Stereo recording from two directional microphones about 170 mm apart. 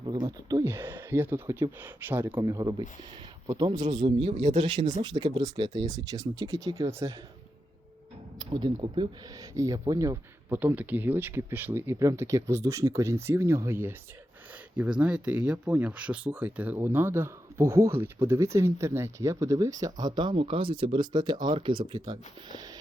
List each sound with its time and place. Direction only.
0.0 s speech: 25° right (ahead or behind)
8.4 s speech: 25° right (ahead or behind)